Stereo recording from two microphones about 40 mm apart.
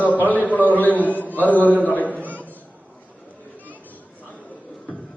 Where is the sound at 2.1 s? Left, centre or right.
Right.